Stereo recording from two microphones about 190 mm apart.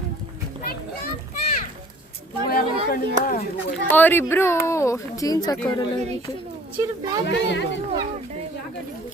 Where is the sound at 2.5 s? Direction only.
50° left (ahead or behind).